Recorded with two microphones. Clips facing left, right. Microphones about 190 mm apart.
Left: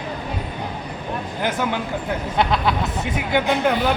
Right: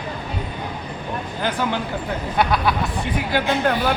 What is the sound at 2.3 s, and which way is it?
Speech, 25° left (ahead or behind).